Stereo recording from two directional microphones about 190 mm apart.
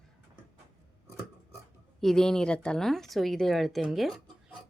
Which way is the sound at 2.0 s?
Centre (ahead or behind).